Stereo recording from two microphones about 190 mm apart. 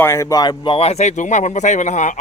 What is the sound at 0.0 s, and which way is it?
Speech, 15° left (ahead or behind).